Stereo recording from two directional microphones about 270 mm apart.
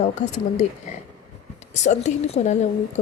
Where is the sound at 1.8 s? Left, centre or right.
Left.